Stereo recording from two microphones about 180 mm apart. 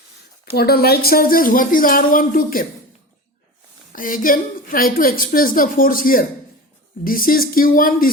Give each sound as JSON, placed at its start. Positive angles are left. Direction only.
{"t": 0.5, "sound": "a woman's voice", "side_deg": 60}
{"t": 3.9, "sound": "a woman's voice", "side_deg": 50}